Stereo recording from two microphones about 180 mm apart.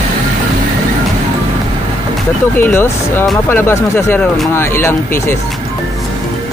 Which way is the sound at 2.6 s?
10° left (ahead or behind).